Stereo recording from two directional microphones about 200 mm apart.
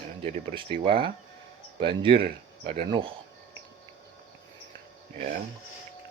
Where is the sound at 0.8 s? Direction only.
25° right (ahead or behind).